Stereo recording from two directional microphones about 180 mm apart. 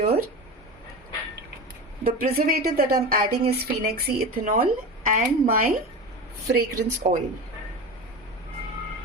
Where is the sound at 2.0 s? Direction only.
55° right (ahead or behind).